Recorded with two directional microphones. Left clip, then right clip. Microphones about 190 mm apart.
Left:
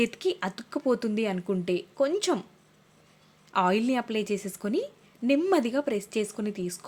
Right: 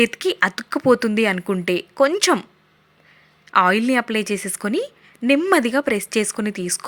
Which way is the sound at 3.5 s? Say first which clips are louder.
Right 9 dB; 10° right (ahead or behind).